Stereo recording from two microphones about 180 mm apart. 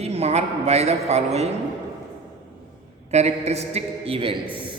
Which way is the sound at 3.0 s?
35° right (ahead or behind).